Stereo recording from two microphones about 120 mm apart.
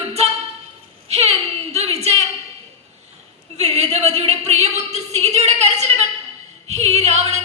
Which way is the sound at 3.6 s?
65° right (ahead or behind).